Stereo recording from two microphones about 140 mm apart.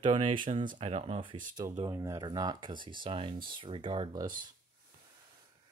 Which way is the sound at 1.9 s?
25° right (ahead or behind).